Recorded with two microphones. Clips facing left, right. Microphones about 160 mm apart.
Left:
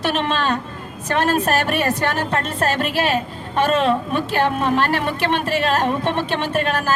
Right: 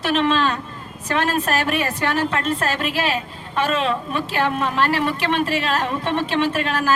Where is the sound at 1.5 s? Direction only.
40° left (ahead or behind).